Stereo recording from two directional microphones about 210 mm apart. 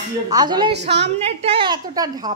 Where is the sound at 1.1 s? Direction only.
30° right (ahead or behind).